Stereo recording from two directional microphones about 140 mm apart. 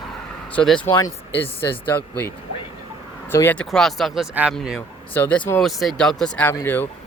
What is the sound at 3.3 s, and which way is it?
Speech, 15° left (ahead or behind).